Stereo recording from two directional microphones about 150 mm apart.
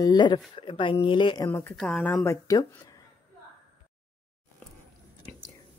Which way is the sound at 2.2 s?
20° left (ahead or behind).